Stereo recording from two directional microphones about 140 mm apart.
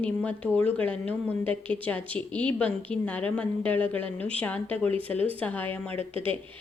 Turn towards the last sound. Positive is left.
turn(degrees=-40)  # may be behind; listen again after turning